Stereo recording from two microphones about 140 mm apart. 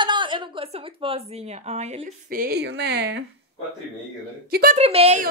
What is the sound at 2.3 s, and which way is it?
Speech, 90° right.